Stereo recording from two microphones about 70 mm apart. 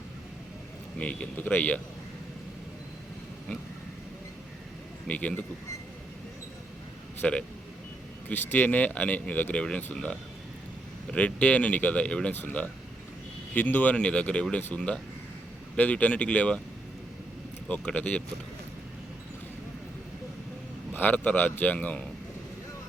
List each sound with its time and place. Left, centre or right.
0.9 s speech: centre
5.0 s speech: centre
7.2 s speech: centre
17.7 s speech: centre
20.9 s speech: left